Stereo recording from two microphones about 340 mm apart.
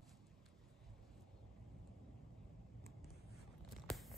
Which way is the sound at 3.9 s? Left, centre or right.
Centre.